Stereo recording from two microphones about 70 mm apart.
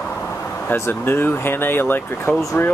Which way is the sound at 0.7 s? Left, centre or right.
Left.